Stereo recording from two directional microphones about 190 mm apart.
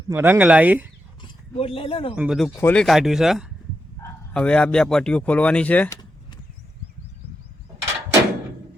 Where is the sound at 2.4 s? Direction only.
10° left (ahead or behind).